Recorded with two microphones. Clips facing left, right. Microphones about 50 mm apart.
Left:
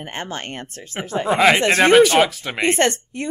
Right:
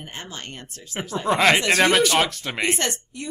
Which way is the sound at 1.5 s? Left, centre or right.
Left.